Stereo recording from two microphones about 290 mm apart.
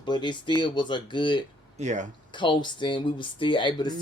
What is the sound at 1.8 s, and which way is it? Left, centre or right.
Speech, right.